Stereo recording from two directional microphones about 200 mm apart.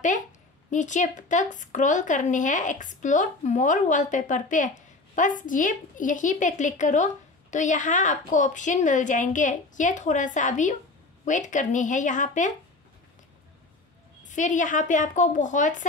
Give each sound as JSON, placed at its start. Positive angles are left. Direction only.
{"t": 0.7, "sound": "a woman's voice", "side_deg": 40}
{"t": 14.2, "sound": "a woman's voice", "side_deg": 40}